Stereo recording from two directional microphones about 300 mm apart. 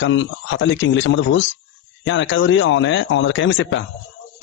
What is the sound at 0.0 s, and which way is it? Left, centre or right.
A man's voice, left.